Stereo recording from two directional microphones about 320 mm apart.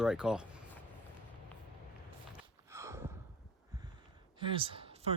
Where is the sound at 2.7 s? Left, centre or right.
Centre.